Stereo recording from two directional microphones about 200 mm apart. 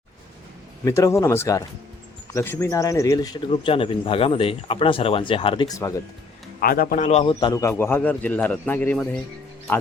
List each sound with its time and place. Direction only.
0.9 s a man's voice: 15° left (ahead or behind)
6.6 s a man's voice: 45° left (ahead or behind); by 9.2 s 10° left (ahead or behind)